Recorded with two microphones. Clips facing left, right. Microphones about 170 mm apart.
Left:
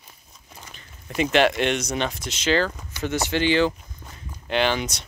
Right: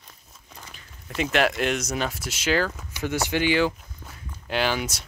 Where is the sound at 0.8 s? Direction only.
Centre (ahead or behind).